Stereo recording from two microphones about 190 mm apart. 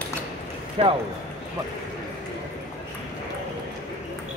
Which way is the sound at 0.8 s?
30° right (ahead or behind).